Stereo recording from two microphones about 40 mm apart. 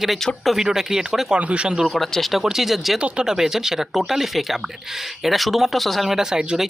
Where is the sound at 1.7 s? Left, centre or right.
Centre.